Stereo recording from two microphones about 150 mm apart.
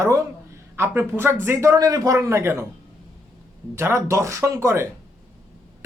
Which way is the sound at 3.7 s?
15° right (ahead or behind).